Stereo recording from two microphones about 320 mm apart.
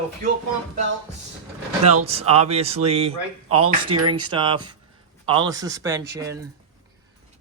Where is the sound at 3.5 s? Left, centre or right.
Right.